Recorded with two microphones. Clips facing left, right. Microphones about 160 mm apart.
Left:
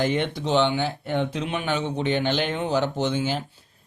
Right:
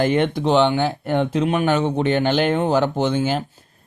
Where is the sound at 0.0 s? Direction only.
55° right (ahead or behind).